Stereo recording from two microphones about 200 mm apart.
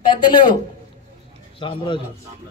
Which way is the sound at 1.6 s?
25° left (ahead or behind).